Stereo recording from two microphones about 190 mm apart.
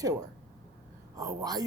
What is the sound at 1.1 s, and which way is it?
Speech, 20° right (ahead or behind).